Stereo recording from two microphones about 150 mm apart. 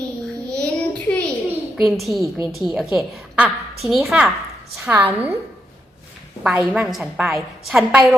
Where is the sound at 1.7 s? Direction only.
Centre (ahead or behind).